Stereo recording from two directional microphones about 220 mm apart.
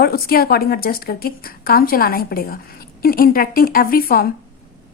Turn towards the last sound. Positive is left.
turn(degrees=40)  # may be behind; listen again after turning